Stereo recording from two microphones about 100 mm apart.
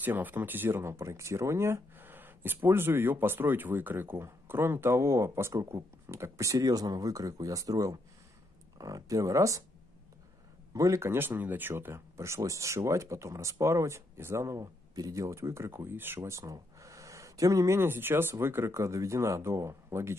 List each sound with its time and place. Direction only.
0.0 s speech: 20° right (ahead or behind)
10.7 s speech: 35° right (ahead or behind)